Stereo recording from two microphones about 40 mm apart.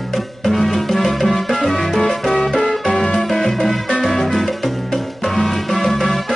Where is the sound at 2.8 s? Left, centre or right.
Centre.